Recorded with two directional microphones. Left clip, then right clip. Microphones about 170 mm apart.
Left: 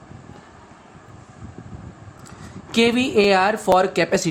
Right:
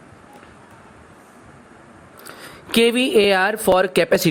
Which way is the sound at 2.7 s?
35° right (ahead or behind).